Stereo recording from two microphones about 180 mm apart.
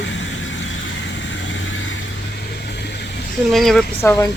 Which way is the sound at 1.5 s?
90° left.